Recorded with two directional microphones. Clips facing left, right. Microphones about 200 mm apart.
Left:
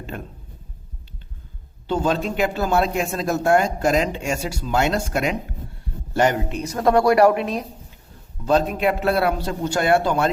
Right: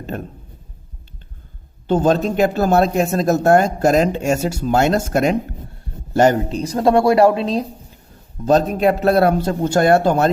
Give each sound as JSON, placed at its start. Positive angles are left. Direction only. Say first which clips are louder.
{"t": 1.9, "sound": "speech", "louder": "right 6 dB", "side_deg": -45}
{"t": 8.4, "sound": "speech", "louder": "right 4 dB", "side_deg": -45}